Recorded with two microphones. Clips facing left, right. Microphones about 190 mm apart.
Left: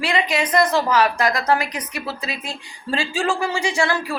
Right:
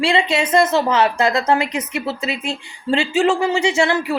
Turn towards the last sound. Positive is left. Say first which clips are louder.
# right 4 dB
turn(degrees=-25)  # may be behind; listen again after turning